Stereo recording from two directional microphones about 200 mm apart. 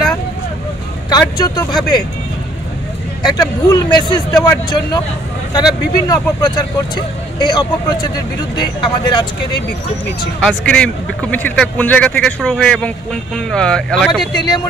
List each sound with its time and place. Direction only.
1.4 s speech: 20° left (ahead or behind)
3.3 s speech: 20° left (ahead or behind)
10.4 s speech: 5° left (ahead or behind)
14.3 s speech: 20° left (ahead or behind)